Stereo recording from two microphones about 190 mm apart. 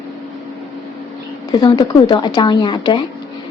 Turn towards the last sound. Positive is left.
turn(degrees=25)  # may be behind; listen again after turning